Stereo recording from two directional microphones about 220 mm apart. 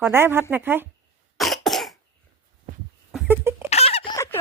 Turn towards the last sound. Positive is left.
turn(degrees=15)  # may be behind; listen again after turning